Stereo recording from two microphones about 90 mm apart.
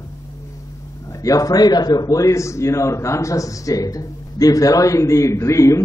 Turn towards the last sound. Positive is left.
turn(degrees=35)  # may be behind; listen again after turning